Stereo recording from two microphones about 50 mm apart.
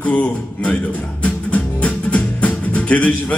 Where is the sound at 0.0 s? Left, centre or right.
Left.